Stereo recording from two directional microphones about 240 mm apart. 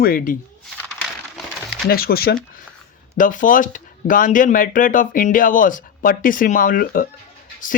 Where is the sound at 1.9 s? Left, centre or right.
Left.